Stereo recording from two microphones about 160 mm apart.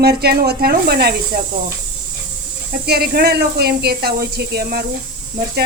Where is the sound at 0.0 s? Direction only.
85° right.